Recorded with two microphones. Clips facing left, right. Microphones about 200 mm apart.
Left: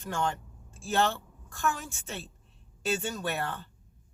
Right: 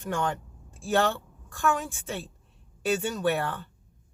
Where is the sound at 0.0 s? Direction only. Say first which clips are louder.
Right 2 dB; 15° right (ahead or behind).